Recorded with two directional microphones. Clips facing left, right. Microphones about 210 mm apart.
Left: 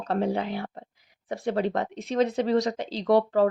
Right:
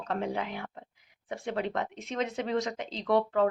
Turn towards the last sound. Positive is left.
turn(degrees=35)  # may be behind; listen again after turning